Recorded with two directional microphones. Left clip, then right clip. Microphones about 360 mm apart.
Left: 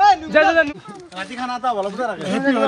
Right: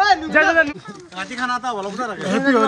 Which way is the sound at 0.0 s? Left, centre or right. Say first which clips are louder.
Left 2 dB; centre.